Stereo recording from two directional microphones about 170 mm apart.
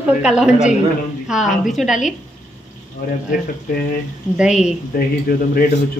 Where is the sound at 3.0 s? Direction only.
60° left (ahead or behind).